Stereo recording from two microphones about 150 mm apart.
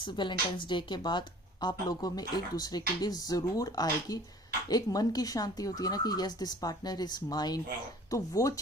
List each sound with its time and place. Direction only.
0.0 s speech: 30° left (ahead or behind)